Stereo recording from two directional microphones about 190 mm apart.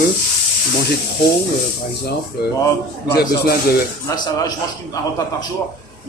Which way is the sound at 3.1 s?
55° left (ahead or behind).